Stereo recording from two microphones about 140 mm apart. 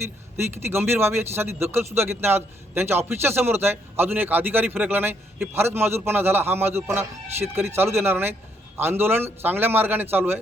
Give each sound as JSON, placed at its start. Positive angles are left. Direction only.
{"t": 0.3, "sound": "a man's voice", "side_deg": -15}